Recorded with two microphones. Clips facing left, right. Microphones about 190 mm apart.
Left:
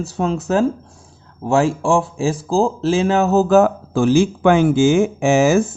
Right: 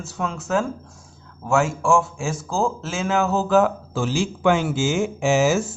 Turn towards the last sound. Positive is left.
turn(degrees=55)  # may be behind; listen again after turning